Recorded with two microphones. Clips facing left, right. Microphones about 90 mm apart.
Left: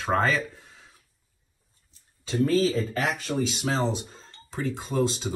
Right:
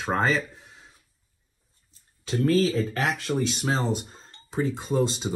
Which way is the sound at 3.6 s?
45° right (ahead or behind).